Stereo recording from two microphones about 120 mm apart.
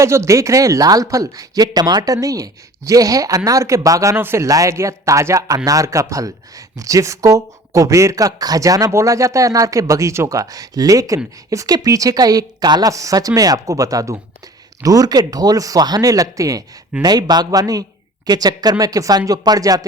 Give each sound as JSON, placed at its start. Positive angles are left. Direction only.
{"t": 0.0, "sound": "speech", "side_deg": -25}